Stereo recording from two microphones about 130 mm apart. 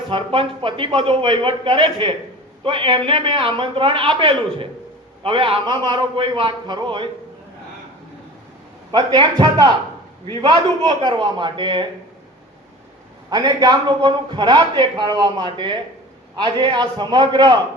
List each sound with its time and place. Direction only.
0.1 s a man's voice: 40° right (ahead or behind)
8.9 s a man's voice: 30° right (ahead or behind)
13.3 s a man's voice: 30° right (ahead or behind)